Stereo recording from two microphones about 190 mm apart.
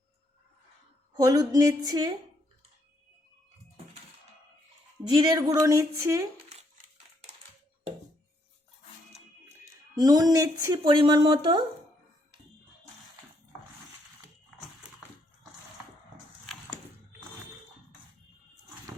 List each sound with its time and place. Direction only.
1.1 s speech: 20° right (ahead or behind)
5.0 s speech: 20° right (ahead or behind)
10.0 s speech: 20° right (ahead or behind)